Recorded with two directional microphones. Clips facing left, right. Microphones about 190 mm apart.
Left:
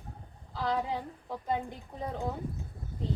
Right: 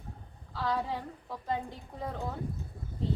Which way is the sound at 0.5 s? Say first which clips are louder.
Left 1 dB; 15° left (ahead or behind).